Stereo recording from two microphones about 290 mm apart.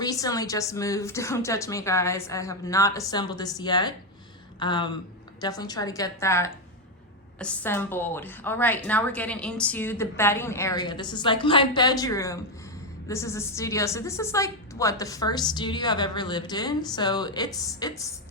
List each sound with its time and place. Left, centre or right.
0.0 s a woman's voice: centre